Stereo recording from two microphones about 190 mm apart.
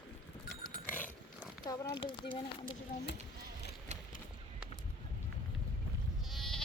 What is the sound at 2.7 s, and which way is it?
Speech, 65° left (ahead or behind).